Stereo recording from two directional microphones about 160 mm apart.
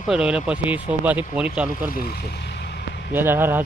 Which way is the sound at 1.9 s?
70° left (ahead or behind).